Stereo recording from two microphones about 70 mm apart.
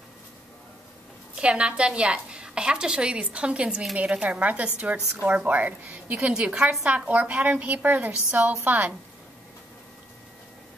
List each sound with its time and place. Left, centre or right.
1.3 s a woman's voice: centre